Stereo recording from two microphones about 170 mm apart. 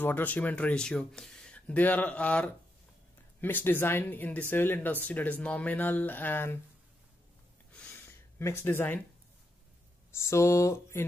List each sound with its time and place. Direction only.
0.0 s speech: 10° left (ahead or behind)
7.7 s gasp: 10° left (ahead or behind)
10.2 s speech: 15° left (ahead or behind)